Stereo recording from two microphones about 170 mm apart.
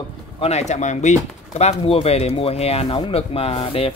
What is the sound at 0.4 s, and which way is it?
Speech, 40° left (ahead or behind).